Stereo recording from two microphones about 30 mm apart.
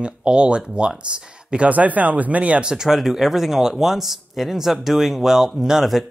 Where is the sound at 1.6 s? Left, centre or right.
Right.